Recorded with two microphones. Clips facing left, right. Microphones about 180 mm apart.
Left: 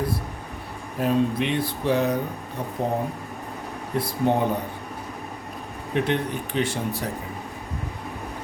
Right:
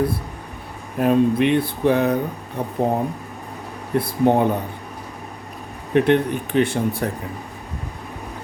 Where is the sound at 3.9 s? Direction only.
55° right (ahead or behind).